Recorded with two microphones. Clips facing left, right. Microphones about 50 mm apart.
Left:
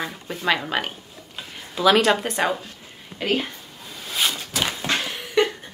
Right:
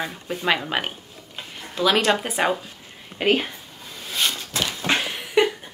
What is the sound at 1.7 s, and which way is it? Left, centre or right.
Speech, centre.